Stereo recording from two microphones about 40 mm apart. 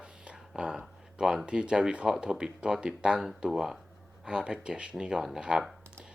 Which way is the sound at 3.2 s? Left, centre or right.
Centre.